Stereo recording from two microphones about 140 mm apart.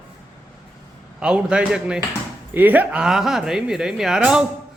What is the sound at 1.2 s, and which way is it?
A man's voice, 5° right (ahead or behind).